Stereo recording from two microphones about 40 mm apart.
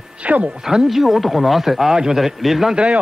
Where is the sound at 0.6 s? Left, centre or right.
Centre.